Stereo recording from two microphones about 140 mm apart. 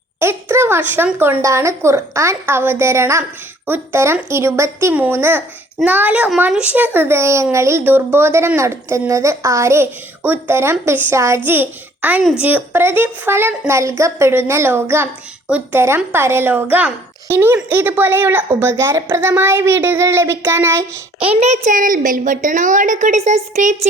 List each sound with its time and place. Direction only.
0.2 s a child's voice: 15° right (ahead or behind)
21.2 s a woman's voice: 45° right (ahead or behind)